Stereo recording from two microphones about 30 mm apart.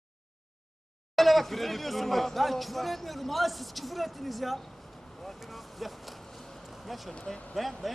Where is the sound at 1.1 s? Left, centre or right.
Centre.